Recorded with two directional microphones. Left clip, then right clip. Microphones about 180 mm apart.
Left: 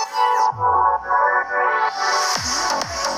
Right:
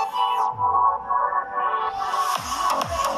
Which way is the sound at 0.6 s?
30° left (ahead or behind).